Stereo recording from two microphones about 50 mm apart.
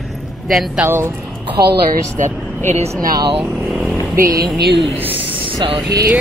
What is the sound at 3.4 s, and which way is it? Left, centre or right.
Vehicle, centre.